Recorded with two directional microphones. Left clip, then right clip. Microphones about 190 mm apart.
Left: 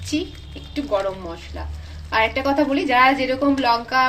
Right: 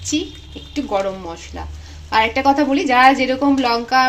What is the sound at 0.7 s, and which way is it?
A woman's voice, 45° right (ahead or behind).